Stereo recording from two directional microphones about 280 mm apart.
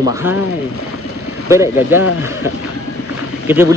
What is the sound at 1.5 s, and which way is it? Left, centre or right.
Speech, centre.